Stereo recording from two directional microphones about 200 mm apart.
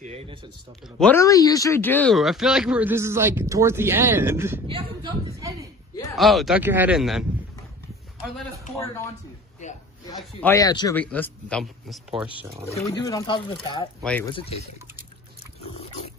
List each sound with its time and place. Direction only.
0.0 s speech: 30° right (ahead or behind)
0.9 s speech: 10° left (ahead or behind); by 4.6 s 10° right (ahead or behind)
4.6 s a woman's voice: 25° right (ahead or behind)
6.1 s speech: centre (ahead or behind)
10.4 s speech: 15° left (ahead or behind)
11.0 s speech: 10° left (ahead or behind)
12.7 s speech: 15° left (ahead or behind)
15.6 s dog: 30° left (ahead or behind)